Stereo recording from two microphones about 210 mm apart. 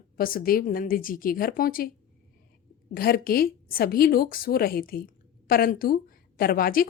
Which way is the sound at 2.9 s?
45° left (ahead or behind).